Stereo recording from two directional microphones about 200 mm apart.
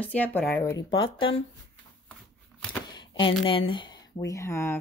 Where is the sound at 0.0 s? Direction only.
10° left (ahead or behind); by 1.3 s 25° left (ahead or behind).